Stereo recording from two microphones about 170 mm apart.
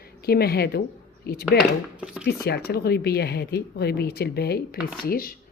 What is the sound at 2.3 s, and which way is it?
Speech, 70° left (ahead or behind).